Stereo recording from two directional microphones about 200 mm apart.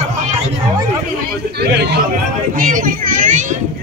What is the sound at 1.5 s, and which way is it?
Speech, 55° right (ahead or behind).